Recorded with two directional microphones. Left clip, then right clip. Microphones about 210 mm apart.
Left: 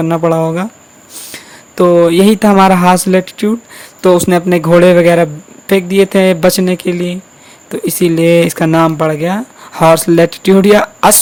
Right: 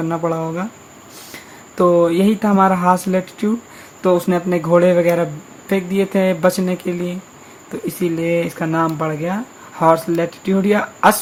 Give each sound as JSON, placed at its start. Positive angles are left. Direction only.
{"t": 0.0, "sound": "a man's voice", "side_deg": 45}